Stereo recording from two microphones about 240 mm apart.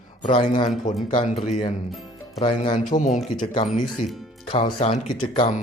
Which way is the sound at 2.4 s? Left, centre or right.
Left.